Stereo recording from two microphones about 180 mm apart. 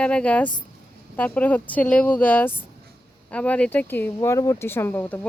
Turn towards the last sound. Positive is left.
turn(degrees=10)  # may be behind; listen again after turning